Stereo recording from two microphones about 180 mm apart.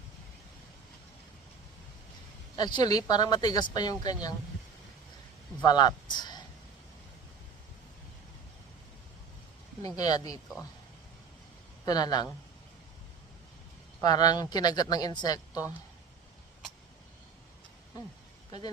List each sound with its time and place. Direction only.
2.6 s speech: 25° left (ahead or behind)
5.6 s speech: 20° left (ahead or behind)
10.0 s speech: 20° left (ahead or behind)
11.9 s speech: 20° left (ahead or behind)
14.0 s speech: 20° left (ahead or behind)